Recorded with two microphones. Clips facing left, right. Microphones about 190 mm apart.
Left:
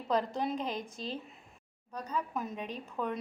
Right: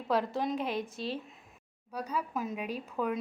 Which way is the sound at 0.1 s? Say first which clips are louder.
Right 1 dB; 5° right (ahead or behind).